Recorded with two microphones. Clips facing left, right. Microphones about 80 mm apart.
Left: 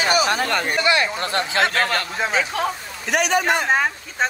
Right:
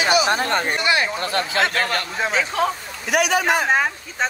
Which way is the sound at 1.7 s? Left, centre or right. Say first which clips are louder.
Left 1 dB; left.